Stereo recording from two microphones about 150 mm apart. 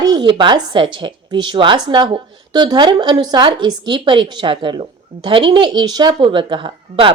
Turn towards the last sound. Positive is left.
turn(degrees=-35)  # may be behind; listen again after turning